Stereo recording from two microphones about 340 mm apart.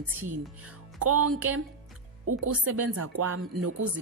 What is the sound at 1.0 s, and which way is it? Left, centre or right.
Speech, right.